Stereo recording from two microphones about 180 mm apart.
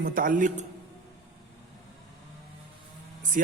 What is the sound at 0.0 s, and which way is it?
Speech, 50° right (ahead or behind).